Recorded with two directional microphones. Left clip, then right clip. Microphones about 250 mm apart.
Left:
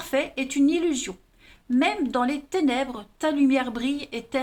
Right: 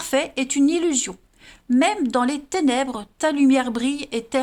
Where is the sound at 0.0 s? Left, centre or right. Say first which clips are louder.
Right 4 dB; right.